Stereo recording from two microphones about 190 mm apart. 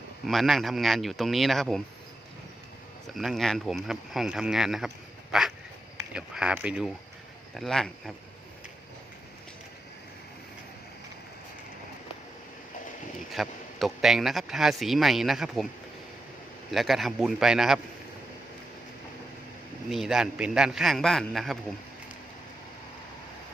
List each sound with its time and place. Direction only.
0.3 s speech: centre (ahead or behind)
3.1 s speech: centre (ahead or behind)
13.3 s speech: centre (ahead or behind)
16.7 s speech: centre (ahead or behind)
19.9 s speech: centre (ahead or behind)